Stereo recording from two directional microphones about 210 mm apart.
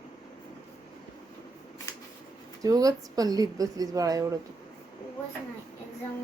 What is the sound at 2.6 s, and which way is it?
Speech, 15° right (ahead or behind).